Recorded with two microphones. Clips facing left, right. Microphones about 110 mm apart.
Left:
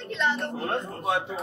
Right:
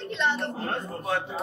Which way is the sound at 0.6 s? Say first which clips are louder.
Left 3 dB; 20° left (ahead or behind).